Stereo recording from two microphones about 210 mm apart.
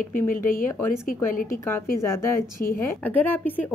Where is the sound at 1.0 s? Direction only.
40° left (ahead or behind).